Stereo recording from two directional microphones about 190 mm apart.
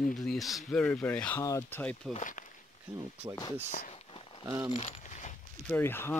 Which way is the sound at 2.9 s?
15° right (ahead or behind).